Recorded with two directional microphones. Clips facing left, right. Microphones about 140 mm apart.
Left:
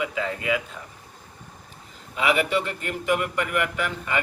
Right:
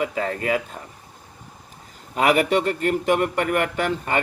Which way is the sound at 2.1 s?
45° right (ahead or behind).